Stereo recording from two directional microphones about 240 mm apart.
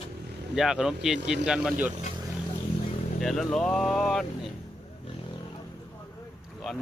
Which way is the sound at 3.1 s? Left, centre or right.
Centre.